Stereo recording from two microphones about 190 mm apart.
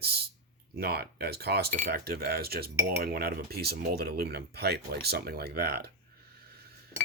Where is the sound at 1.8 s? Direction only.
50° right (ahead or behind).